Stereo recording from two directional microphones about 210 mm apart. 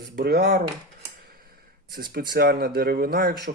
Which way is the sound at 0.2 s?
50° right (ahead or behind).